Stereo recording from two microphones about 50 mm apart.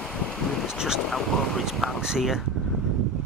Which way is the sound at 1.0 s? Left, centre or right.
Centre.